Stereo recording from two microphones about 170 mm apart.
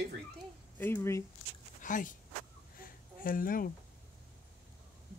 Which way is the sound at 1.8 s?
50° left (ahead or behind).